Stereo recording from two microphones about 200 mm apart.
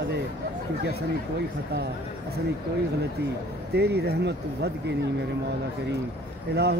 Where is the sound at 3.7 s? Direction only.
55° right (ahead or behind).